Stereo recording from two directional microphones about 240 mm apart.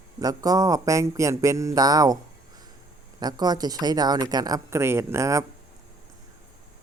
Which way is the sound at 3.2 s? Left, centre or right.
Centre.